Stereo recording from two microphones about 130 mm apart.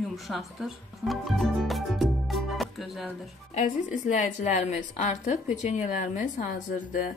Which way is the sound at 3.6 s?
70° left (ahead or behind).